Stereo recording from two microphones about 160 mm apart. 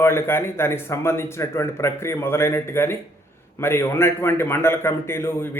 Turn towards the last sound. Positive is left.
turn(degrees=15)  # may be behind; listen again after turning